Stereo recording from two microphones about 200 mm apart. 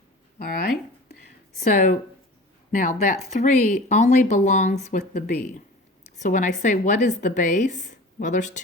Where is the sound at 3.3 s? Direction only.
40° left (ahead or behind).